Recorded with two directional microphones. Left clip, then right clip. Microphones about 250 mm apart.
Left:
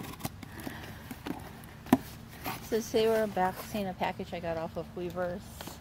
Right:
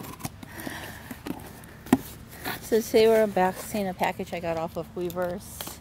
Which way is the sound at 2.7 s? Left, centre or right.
Right.